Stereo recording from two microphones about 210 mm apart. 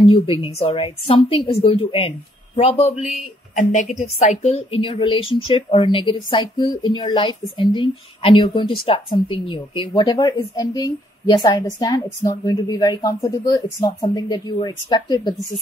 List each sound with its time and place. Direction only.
0.1 s a woman's voice: 25° left (ahead or behind)